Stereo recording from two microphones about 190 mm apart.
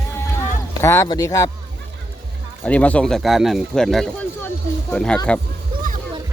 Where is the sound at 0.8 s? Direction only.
15° left (ahead or behind).